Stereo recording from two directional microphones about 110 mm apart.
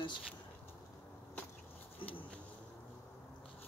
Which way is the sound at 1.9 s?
55° left (ahead or behind).